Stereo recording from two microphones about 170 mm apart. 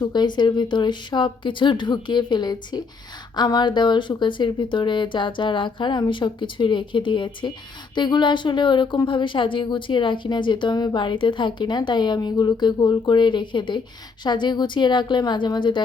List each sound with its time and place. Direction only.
0.0 s speech: 25° left (ahead or behind)